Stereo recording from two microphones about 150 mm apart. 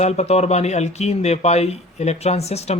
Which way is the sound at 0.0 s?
45° left (ahead or behind).